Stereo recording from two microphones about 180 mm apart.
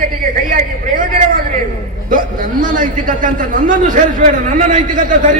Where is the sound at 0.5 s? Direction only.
50° right (ahead or behind).